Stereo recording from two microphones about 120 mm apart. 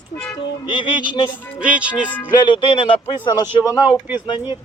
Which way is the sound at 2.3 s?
40° left (ahead or behind).